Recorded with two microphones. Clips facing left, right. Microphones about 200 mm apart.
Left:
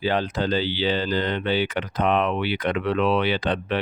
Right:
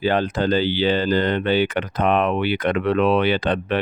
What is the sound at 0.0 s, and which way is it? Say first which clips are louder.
Speech: right 4 dB; 50° right (ahead or behind).